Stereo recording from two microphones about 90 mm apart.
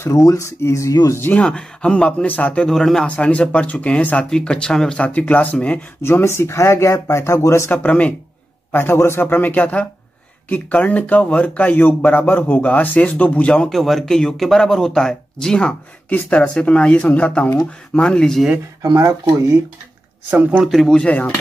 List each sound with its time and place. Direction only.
0.0 s a man's voice: 40° left (ahead or behind)
1.4 s speech: 10° left (ahead or behind)
3.1 s speech: 15° left (ahead or behind)
6.0 s speech: 30° left (ahead or behind)
7.7 s speech: 15° left (ahead or behind)
8.7 s a man's voice: 25° left (ahead or behind)
13.7 s speech: centre (ahead or behind)
18.8 s speech: 40° right (ahead or behind)
20.2 s speech: 15° right (ahead or behind)
20.6 s speech: centre (ahead or behind)